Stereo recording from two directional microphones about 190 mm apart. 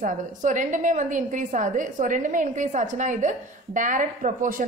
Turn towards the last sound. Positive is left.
turn(degrees=-45)  # may be behind; listen again after turning